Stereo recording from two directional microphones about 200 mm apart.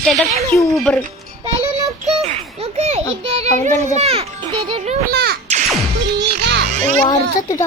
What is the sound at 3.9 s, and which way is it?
A child's voice, 30° right (ahead or behind).